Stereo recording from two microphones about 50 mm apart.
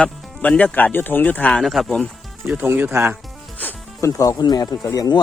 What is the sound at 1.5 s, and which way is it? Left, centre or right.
Speech, centre.